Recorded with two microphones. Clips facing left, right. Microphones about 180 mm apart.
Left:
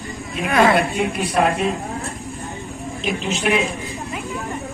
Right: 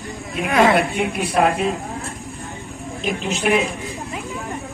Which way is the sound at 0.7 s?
Centre (ahead or behind).